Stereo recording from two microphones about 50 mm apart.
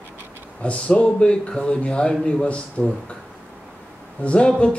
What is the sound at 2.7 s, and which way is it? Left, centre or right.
Speech, left.